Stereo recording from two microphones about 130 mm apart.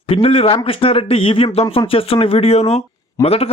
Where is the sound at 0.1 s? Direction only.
45° left (ahead or behind).